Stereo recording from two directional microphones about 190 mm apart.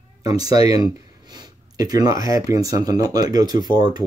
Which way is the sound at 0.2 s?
20° right (ahead or behind).